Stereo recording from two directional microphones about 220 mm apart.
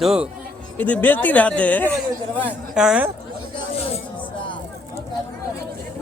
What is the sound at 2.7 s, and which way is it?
Speech, 5° right (ahead or behind).